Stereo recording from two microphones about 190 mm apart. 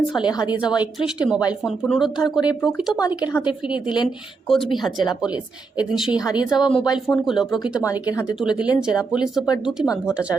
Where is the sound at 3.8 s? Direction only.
25° left (ahead or behind).